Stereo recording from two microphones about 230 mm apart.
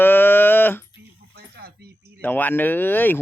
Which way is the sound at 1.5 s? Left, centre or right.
Right.